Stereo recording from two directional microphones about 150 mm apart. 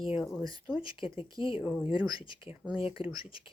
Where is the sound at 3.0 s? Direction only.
35° left (ahead or behind).